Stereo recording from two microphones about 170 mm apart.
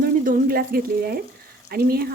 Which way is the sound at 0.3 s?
60° right (ahead or behind).